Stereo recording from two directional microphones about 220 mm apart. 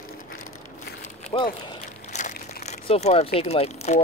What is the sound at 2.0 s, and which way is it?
Crumpling, 35° left (ahead or behind).